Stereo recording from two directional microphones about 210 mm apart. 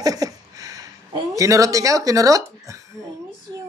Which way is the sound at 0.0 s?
15° right (ahead or behind).